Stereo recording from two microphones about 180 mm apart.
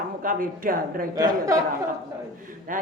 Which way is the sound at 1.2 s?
20° right (ahead or behind).